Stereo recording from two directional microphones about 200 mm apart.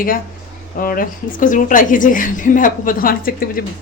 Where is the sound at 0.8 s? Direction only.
45° left (ahead or behind).